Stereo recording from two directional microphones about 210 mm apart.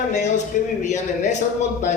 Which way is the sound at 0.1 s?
35° left (ahead or behind).